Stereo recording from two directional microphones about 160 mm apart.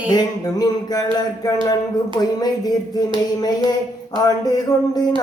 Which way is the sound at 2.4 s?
25° left (ahead or behind).